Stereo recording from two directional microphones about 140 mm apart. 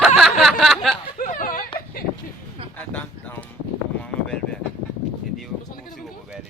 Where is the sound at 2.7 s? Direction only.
15° left (ahead or behind).